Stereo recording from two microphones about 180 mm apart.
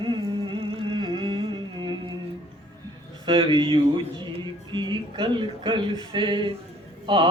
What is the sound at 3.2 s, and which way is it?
Speech, 25° right (ahead or behind).